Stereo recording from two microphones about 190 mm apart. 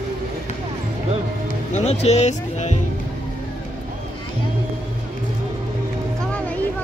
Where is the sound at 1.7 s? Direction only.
35° left (ahead or behind).